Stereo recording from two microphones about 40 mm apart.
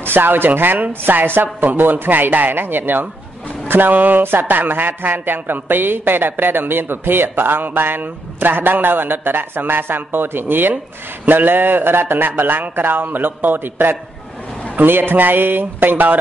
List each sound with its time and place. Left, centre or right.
0.0 s speech: right
4.2 s speech: right